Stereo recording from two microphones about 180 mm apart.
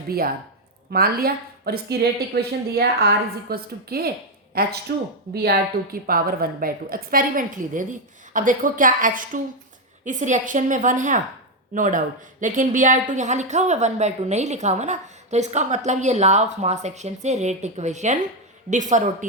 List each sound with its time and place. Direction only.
0.9 s a woman's voice: 55° right (ahead or behind)